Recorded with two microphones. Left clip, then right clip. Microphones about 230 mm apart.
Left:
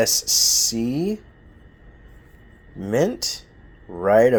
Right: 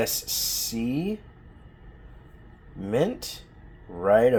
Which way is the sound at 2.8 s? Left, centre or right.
Left.